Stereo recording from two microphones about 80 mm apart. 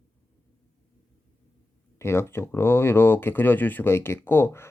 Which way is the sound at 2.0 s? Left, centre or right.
Left.